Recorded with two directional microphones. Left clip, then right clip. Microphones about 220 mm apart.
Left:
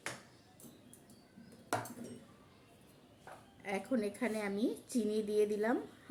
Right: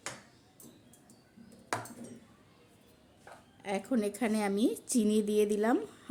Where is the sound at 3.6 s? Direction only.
45° right (ahead or behind).